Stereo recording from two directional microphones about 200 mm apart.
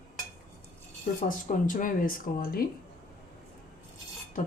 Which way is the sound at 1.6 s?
40° left (ahead or behind).